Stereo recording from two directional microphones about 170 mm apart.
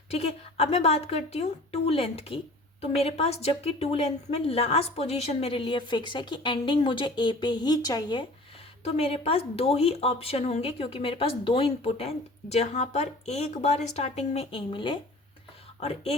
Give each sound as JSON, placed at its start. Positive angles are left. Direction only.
{"t": 0.1, "sound": "speech", "side_deg": 40}
{"t": 8.8, "sound": "speech", "side_deg": 35}